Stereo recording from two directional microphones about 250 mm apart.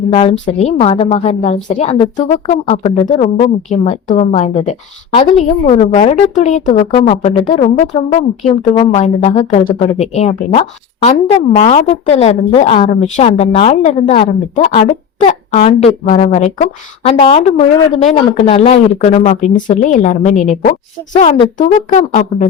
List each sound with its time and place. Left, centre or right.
0.1 s speech: left